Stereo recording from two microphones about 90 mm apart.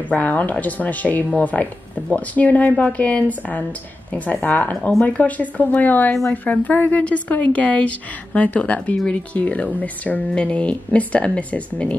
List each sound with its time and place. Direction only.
0.1 s a woman's voice: 15° left (ahead or behind)